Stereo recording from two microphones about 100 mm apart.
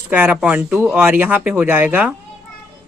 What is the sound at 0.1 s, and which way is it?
Speech, 15° right (ahead or behind).